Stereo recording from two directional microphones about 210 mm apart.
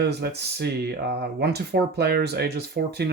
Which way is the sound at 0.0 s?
50° right (ahead or behind).